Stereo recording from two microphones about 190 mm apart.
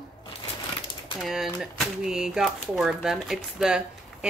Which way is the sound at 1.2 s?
Centre (ahead or behind).